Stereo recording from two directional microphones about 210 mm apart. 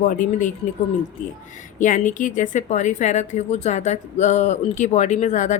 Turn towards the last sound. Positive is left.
turn(degrees=35)  # may be behind; listen again after turning